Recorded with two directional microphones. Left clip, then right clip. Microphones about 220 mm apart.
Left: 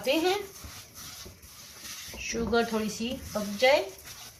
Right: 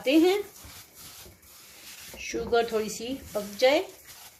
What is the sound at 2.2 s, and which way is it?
Speech, 50° right (ahead or behind).